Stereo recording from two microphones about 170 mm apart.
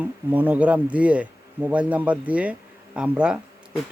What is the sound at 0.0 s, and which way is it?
Speech, 10° right (ahead or behind).